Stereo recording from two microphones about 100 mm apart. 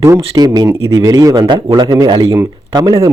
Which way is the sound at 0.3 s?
45° right (ahead or behind).